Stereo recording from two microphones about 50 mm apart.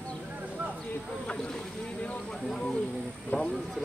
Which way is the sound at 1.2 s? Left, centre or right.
Left.